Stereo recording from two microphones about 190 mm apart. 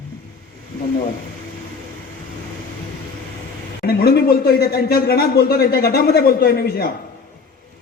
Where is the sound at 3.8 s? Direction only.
55° left (ahead or behind).